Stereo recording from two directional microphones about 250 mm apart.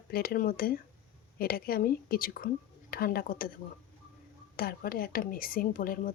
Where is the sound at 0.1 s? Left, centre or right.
Left.